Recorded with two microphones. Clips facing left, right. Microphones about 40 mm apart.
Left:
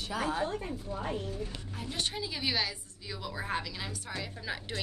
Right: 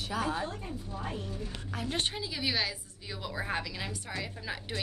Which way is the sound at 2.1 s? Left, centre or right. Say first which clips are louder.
Even; centre.